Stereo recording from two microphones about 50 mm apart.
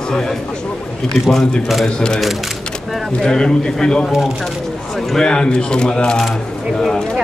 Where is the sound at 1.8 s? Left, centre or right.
Centre.